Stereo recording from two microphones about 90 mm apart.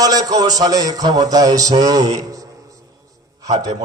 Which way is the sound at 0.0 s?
45° right (ahead or behind).